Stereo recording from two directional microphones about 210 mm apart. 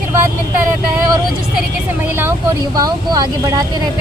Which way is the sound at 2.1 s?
10° right (ahead or behind).